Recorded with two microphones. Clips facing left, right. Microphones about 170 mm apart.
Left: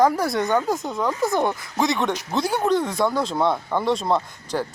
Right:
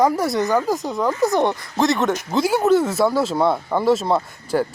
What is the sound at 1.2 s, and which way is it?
Speech, 20° right (ahead or behind).